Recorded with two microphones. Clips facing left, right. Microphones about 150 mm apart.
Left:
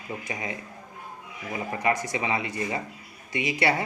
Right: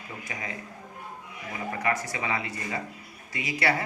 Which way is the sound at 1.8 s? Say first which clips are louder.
Left 3 dB; 20° left (ahead or behind).